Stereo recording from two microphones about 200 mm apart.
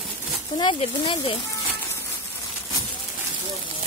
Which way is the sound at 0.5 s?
25° left (ahead or behind).